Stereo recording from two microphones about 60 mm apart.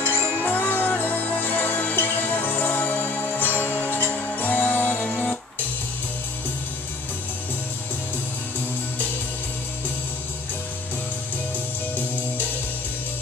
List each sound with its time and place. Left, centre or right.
0.0 s music: left